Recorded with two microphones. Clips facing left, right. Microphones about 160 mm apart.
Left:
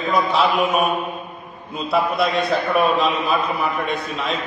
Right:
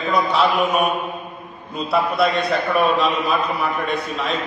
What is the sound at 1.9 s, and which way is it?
A man's voice, centre (ahead or behind).